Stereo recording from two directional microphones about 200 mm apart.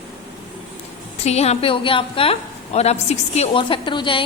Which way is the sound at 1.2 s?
35° left (ahead or behind).